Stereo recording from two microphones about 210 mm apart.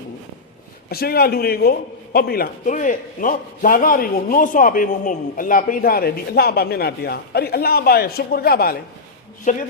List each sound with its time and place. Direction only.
0.9 s a man's voice: 45° left (ahead or behind)